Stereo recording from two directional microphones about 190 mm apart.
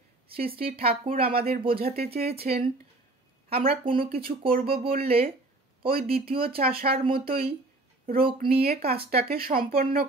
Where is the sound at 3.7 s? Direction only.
25° right (ahead or behind).